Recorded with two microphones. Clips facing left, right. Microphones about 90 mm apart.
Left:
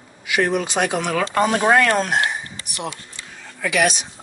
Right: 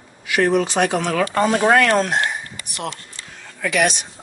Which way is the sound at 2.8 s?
15° left (ahead or behind).